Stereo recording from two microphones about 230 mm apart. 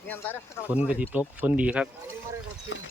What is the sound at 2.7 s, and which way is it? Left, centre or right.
Speech, left.